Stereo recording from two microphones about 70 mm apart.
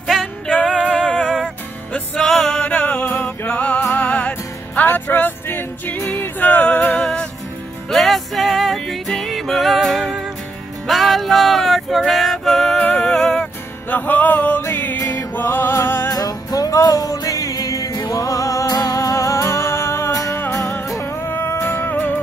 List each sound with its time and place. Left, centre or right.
0.0 s music: centre
2.2 s music: centre
2.6 s music: centre
7.0 s music: centre
7.9 s music: centre
12.8 s music: left
13.1 s music: centre
13.8 s music: left
16.1 s music: left